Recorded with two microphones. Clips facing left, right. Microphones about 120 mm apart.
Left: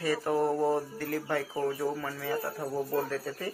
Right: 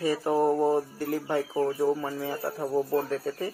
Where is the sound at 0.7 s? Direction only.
15° right (ahead or behind).